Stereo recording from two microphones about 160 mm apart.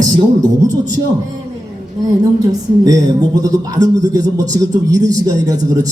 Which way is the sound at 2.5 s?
25° right (ahead or behind).